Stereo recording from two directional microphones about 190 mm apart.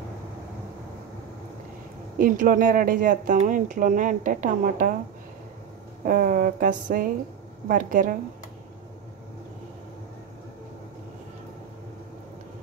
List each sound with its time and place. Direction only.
2.1 s speech: 50° right (ahead or behind)
6.0 s speech: 50° right (ahead or behind)